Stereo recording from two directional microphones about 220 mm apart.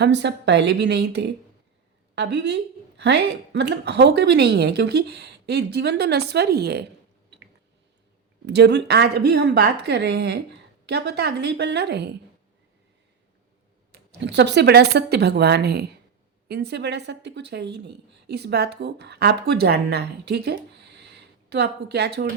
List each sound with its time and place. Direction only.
0.0 s a woman's voice: 50° right (ahead or behind)
8.4 s a woman's voice: 50° right (ahead or behind)
13.9 s a woman's voice: 50° right (ahead or behind)
21.0 s a sound: 50° right (ahead or behind)